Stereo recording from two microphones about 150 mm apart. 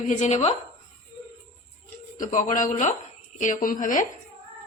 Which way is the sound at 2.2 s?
60° left (ahead or behind).